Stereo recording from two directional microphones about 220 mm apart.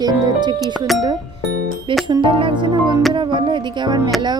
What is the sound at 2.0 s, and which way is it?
Music, 20° right (ahead or behind).